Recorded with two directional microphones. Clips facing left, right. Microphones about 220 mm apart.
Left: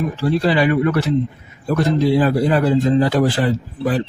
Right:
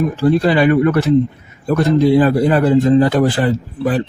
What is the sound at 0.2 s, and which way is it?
Speech, 50° right (ahead or behind).